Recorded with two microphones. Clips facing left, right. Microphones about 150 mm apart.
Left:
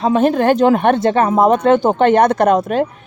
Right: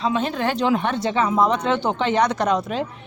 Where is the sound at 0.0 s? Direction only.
50° left (ahead or behind).